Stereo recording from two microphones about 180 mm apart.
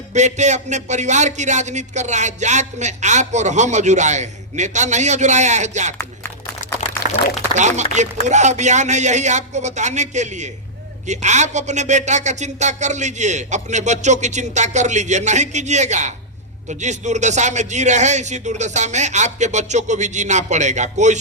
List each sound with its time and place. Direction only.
0.1 s speech: 40° right (ahead or behind)
6.0 s a sound: 15° left (ahead or behind)
7.8 s speech: 40° right (ahead or behind)